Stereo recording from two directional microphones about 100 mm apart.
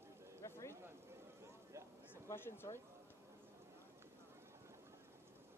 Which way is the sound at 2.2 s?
20° left (ahead or behind).